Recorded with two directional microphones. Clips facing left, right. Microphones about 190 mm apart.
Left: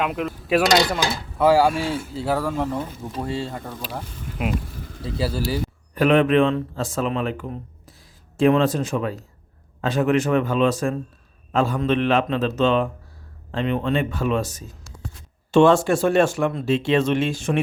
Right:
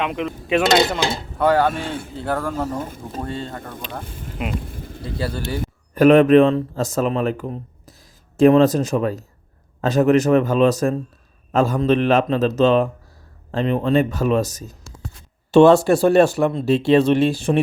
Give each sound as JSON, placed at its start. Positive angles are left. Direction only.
{"t": 0.0, "sound": "speech", "side_deg": 5}
{"t": 0.8, "sound": "speech", "side_deg": -25}
{"t": 1.4, "sound": "speech", "side_deg": 5}
{"t": 2.8, "sound": "speech", "side_deg": -50}
{"t": 3.2, "sound": "speech", "side_deg": 5}
{"t": 5.9, "sound": "speech", "side_deg": -45}